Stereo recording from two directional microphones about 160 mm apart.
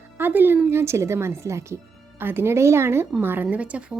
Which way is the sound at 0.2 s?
10° right (ahead or behind).